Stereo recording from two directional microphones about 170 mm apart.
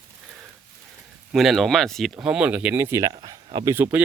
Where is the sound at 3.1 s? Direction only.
25° right (ahead or behind).